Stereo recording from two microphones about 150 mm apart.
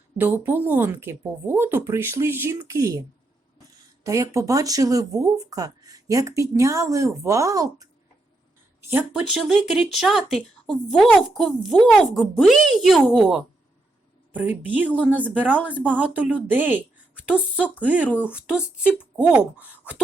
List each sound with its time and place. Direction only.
0.2 s a woman's voice: 15° right (ahead or behind)
4.0 s speech: 20° right (ahead or behind)
8.9 s a woman's voice: 10° right (ahead or behind)